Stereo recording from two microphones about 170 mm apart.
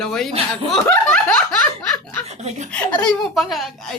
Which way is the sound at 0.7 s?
5° left (ahead or behind).